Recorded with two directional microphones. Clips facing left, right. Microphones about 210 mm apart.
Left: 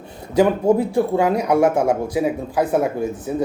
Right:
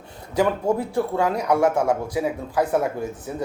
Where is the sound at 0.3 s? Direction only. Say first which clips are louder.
Left 6 dB; 20° left (ahead or behind).